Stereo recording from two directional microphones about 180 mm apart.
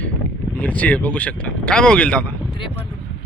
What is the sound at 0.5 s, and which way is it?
Speech, 10° left (ahead or behind).